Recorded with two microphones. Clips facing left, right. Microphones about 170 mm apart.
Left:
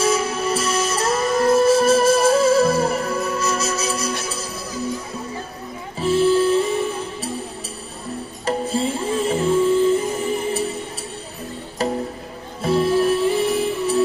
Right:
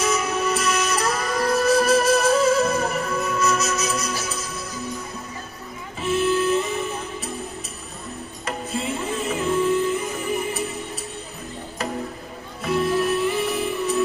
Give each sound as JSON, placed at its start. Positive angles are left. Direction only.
{"t": 0.0, "sound": "music", "side_deg": 30}
{"t": 5.9, "sound": "music", "side_deg": 30}
{"t": 8.5, "sound": "music", "side_deg": 30}
{"t": 11.8, "sound": "music", "side_deg": 30}